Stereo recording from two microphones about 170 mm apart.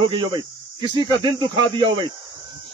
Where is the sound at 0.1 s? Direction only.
25° right (ahead or behind).